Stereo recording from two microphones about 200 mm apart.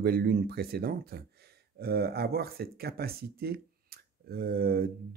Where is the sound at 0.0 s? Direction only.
50° right (ahead or behind).